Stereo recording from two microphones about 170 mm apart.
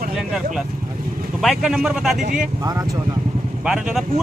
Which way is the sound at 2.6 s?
20° right (ahead or behind).